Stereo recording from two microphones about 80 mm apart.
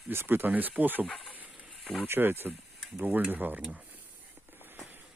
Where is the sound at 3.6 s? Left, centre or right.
Centre.